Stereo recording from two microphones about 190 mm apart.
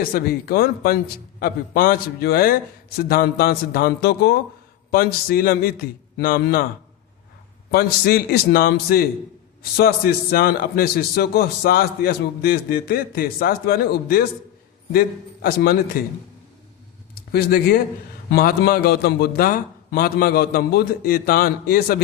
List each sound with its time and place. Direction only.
0.0 s a man's voice: 50° left (ahead or behind)
7.7 s a man's voice: 55° left (ahead or behind)
17.2 s a man's voice: 55° left (ahead or behind)